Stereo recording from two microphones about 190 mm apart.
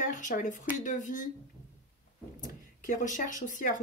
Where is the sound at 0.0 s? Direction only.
45° left (ahead or behind).